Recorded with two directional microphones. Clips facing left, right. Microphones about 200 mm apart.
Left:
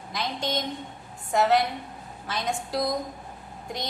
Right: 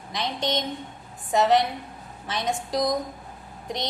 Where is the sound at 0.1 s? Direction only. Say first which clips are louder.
Right 2 dB; 20° right (ahead or behind).